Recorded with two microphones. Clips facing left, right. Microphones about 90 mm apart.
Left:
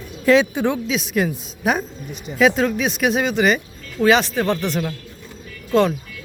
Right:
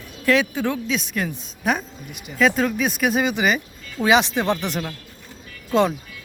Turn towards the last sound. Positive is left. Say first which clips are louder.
# left 2 dB
turn(degrees=-15)  # may be behind; listen again after turning